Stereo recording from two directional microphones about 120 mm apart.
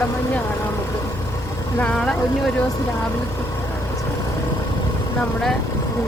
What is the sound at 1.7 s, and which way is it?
Speech, 10° left (ahead or behind).